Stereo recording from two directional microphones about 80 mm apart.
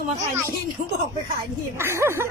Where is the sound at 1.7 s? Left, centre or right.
Right.